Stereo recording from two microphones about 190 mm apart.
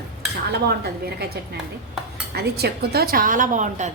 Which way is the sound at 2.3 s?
55° right (ahead or behind).